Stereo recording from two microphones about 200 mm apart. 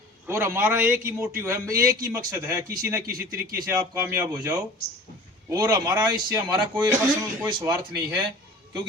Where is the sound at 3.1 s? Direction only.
45° right (ahead or behind).